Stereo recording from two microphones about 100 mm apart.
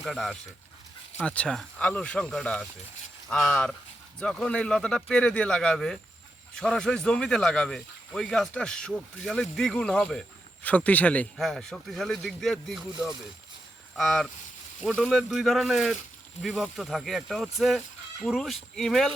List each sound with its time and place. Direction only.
0.0 s speech: centre (ahead or behind)
11.3 s speech: centre (ahead or behind)
13.9 s speech: 5° left (ahead or behind)